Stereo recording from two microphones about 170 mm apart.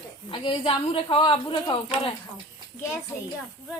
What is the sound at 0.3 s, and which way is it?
A woman's voice, 30° left (ahead or behind).